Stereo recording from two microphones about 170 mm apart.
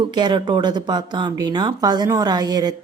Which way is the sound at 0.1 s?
25° right (ahead or behind).